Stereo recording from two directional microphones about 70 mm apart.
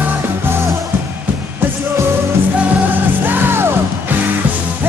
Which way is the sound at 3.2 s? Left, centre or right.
Right.